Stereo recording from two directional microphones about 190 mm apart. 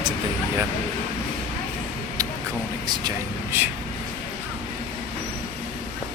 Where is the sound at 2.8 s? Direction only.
25° right (ahead or behind).